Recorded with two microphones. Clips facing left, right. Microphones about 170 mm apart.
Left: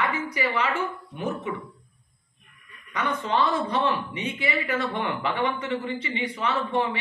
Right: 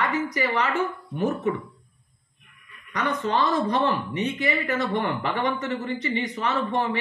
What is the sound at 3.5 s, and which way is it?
Speech, 45° right (ahead or behind).